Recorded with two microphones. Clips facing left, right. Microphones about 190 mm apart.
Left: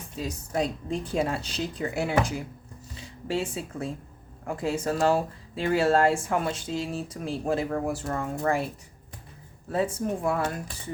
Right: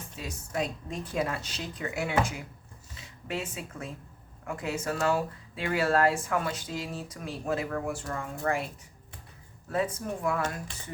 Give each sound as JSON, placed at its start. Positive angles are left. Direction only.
{"t": 0.2, "sound": "a woman's voice", "side_deg": 35}
{"t": 9.7, "sound": "speech", "side_deg": 30}